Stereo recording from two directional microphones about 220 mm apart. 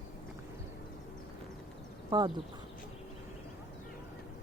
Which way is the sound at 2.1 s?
20° right (ahead or behind).